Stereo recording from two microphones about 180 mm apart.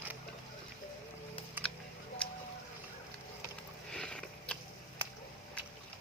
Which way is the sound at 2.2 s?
5° left (ahead or behind).